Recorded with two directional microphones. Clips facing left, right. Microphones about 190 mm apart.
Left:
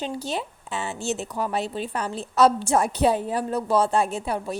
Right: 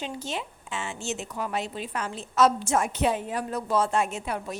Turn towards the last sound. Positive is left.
turn(degrees=35)  # may be behind; listen again after turning